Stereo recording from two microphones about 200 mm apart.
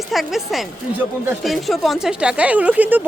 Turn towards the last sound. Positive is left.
turn(degrees=-10)  # may be behind; listen again after turning